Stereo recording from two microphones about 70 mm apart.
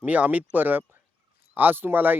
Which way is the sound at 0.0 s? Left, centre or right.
Right.